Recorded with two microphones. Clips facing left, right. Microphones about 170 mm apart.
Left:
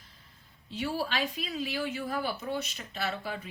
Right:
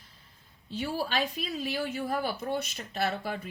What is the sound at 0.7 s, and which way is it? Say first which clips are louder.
Speech: even; 40° right (ahead or behind).